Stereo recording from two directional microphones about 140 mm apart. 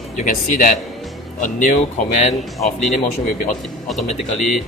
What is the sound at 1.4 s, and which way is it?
Speech, 65° left (ahead or behind).